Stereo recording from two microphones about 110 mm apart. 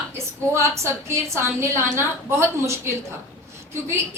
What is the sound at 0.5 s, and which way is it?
A woman's voice, 25° right (ahead or behind).